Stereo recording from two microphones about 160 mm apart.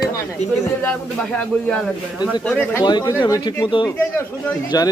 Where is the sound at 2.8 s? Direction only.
25° left (ahead or behind).